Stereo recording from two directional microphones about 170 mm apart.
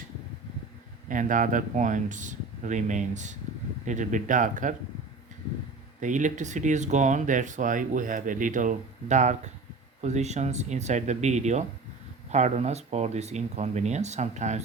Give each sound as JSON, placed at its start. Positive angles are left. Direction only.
{"t": 1.0, "sound": "speech", "side_deg": -50}
{"t": 6.0, "sound": "speech", "side_deg": -45}